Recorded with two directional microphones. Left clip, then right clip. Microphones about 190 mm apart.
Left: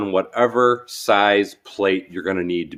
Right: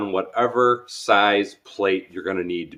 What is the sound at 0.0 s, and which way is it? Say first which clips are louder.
Speech: left 3 dB; 60° left (ahead or behind).